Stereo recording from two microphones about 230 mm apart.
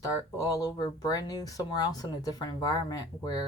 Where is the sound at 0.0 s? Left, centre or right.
Centre.